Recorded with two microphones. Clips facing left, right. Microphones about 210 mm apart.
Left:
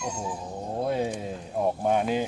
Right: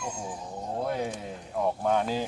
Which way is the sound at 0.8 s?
25° left (ahead or behind).